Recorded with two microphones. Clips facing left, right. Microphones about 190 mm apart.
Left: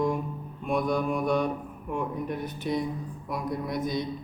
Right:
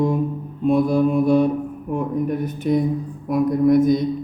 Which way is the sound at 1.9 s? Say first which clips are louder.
Right 8 dB; 40° right (ahead or behind).